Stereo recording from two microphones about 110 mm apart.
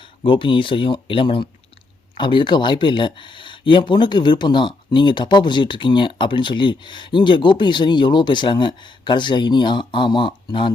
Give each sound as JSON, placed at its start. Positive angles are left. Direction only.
{"t": 0.2, "sound": "speech", "side_deg": 50}